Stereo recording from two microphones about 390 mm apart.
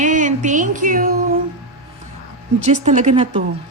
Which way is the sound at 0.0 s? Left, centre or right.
Centre.